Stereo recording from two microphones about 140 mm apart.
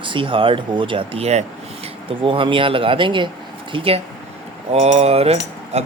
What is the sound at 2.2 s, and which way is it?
Speech, 40° right (ahead or behind).